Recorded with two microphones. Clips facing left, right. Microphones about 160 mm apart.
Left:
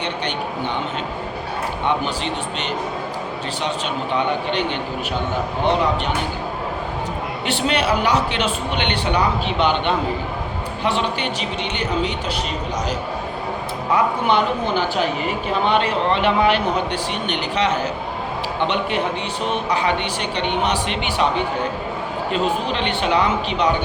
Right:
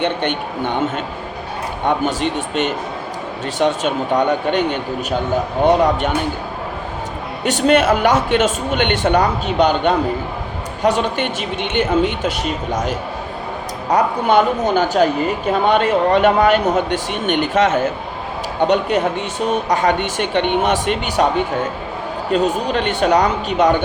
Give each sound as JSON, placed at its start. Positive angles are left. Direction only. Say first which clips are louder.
{"t": 0.0, "sound": "speech", "louder": "right 5 dB", "side_deg": -50}
{"t": 7.4, "sound": "speech", "louder": "right 7 dB", "side_deg": -45}
{"t": 13.9, "sound": "speech", "louder": "right 4 dB", "side_deg": -45}